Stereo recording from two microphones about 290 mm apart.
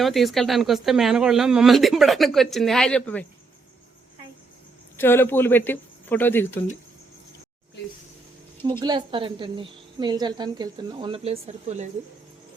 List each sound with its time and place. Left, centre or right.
0.0 s speech: centre
4.9 s speech: centre
8.8 s a woman's voice: centre